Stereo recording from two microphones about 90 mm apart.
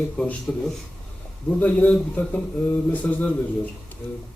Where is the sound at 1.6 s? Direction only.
15° left (ahead or behind).